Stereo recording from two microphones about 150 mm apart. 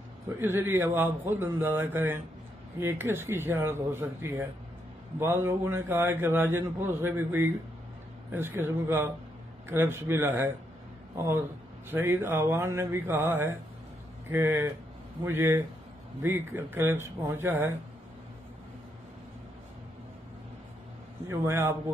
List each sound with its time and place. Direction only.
0.4 s a man's voice: 15° right (ahead or behind)
11.9 s a man's voice: 15° right (ahead or behind)
21.3 s a man's voice: 20° right (ahead or behind)